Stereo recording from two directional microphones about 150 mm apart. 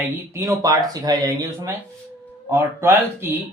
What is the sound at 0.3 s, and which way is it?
Speech, 20° right (ahead or behind).